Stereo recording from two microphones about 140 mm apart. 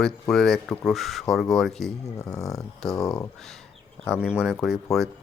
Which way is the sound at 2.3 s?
25° left (ahead or behind).